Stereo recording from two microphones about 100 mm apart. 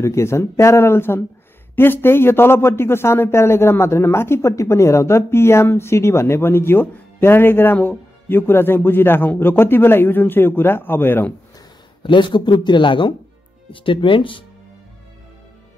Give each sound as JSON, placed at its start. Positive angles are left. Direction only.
{"t": 0.0, "sound": "a man's voice", "side_deg": 30}
{"t": 12.0, "sound": "speech", "side_deg": 50}